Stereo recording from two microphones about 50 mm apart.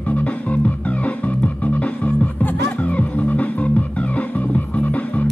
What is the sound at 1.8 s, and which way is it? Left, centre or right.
Music, left.